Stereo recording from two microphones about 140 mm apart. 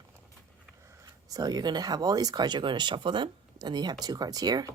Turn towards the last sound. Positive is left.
turn(degrees=-30)  # may be behind; listen again after turning